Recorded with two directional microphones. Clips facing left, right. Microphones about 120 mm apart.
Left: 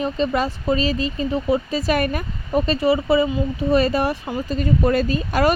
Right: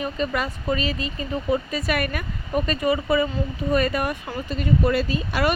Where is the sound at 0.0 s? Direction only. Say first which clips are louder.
Left 5 dB; 30° left (ahead or behind).